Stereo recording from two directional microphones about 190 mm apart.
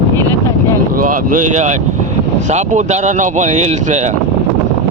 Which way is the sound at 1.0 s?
45° right (ahead or behind).